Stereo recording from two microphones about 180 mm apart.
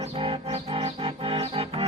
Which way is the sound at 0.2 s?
30° right (ahead or behind).